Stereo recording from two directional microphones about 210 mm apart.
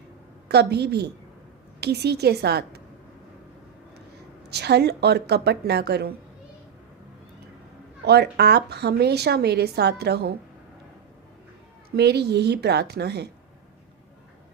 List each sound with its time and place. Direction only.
0.4 s a woman's voice: 50° right (ahead or behind)
4.4 s a woman's voice: 50° right (ahead or behind)
8.0 s a woman's voice: 50° right (ahead or behind)
11.9 s a woman's voice: 50° right (ahead or behind)